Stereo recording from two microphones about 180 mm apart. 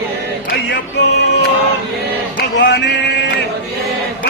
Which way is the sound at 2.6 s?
70° left (ahead or behind).